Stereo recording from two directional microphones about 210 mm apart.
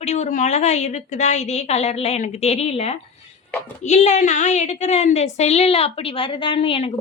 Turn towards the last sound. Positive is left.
turn(degrees=30)  # may be behind; listen again after turning